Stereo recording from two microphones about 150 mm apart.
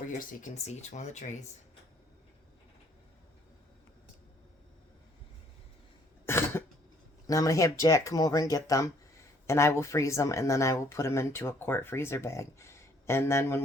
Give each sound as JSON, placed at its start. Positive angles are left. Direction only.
{"t": 0.2, "sound": "speech", "side_deg": 60}
{"t": 6.2, "sound": "cough", "side_deg": 15}
{"t": 7.3, "sound": "speech", "side_deg": 20}